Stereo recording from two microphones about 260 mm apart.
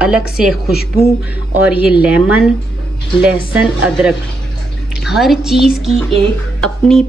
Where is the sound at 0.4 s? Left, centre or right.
Centre.